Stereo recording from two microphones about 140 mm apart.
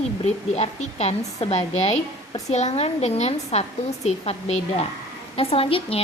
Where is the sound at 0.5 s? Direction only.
50° left (ahead or behind).